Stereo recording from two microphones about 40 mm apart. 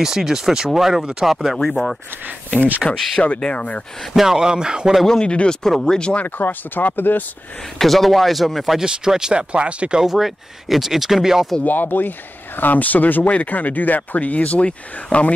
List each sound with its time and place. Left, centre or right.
0.0 s speech: centre
2.8 s speech: left
4.1 s speech: centre
5.2 s speech: left
5.6 s speech: centre
5.9 s speech: left
6.2 s speech: left
7.8 s speech: centre
8.8 s speech: centre
10.0 s speech: centre
11.6 s speech: left